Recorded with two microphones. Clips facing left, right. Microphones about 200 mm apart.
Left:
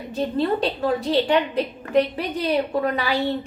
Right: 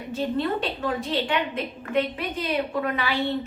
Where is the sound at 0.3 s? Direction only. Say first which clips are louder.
Left 8 dB; 35° left (ahead or behind).